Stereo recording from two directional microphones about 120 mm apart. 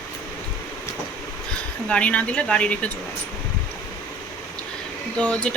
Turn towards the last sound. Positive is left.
turn(degrees=10)  # may be behind; listen again after turning